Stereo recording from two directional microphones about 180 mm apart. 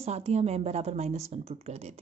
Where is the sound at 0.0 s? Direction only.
35° right (ahead or behind).